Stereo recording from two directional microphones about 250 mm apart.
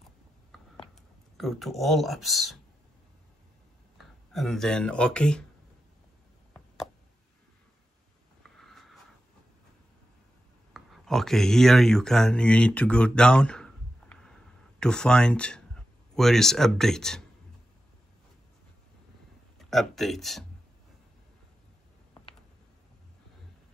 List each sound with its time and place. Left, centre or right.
0.5 s a sound: centre
1.3 s speech: centre
4.0 s speech: centre
8.4 s a sound: centre
10.7 s speech: centre
19.6 s speech: centre